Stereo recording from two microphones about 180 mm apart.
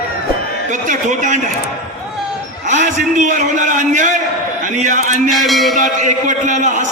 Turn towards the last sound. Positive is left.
turn(degrees=-45)  # may be behind; listen again after turning